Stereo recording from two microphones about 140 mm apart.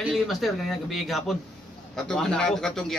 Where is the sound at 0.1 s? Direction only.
Centre (ahead or behind).